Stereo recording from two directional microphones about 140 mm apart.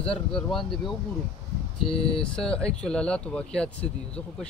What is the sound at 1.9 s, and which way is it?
Speech, 40° left (ahead or behind).